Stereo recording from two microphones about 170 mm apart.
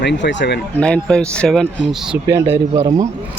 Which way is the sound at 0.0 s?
90° left.